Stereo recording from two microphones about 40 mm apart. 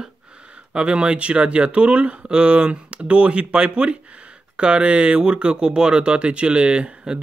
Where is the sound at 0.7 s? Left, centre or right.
Right.